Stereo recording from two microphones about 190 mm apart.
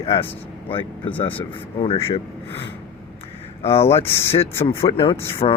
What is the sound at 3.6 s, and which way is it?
Speech, 30° left (ahead or behind).